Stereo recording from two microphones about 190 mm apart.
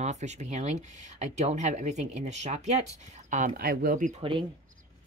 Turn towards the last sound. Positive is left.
turn(degrees=-25)  # may be behind; listen again after turning